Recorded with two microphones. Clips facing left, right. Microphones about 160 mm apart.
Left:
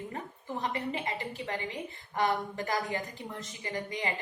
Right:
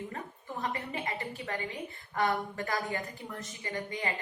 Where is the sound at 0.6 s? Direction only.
25° left (ahead or behind).